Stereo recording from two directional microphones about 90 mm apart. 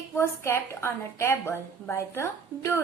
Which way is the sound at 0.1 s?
25° left (ahead or behind).